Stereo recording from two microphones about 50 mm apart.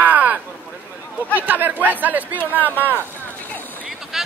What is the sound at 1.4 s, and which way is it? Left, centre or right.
A man's voice, right.